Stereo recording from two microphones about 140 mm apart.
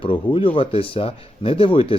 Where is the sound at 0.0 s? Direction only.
40° left (ahead or behind).